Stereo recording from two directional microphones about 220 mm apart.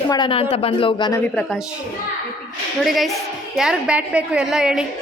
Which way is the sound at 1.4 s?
Centre (ahead or behind).